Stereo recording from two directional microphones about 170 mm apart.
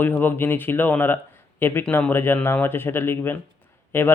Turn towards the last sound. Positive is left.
turn(degrees=15)  # may be behind; listen again after turning